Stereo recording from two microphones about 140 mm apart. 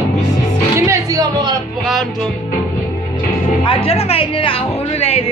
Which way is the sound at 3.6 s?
40° left (ahead or behind).